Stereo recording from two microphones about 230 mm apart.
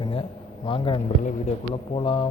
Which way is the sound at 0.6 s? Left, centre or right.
Left.